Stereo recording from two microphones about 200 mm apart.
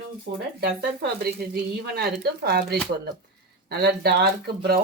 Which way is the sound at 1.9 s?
55° right (ahead or behind).